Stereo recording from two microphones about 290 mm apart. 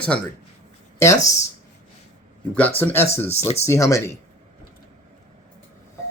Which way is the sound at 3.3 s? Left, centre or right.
Left.